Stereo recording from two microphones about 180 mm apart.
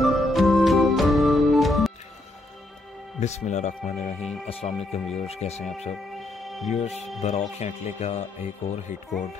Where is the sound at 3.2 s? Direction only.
40° left (ahead or behind).